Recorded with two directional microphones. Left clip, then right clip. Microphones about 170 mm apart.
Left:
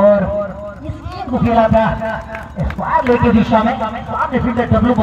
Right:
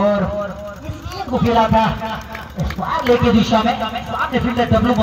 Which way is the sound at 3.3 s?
50° right (ahead or behind).